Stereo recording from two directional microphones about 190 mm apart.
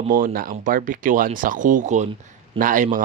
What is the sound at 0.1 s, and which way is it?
Speech, 45° right (ahead or behind).